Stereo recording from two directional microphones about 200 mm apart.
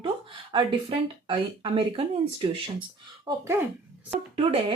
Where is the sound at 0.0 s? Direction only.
25° right (ahead or behind).